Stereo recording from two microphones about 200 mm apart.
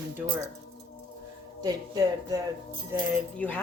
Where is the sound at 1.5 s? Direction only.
20° right (ahead or behind).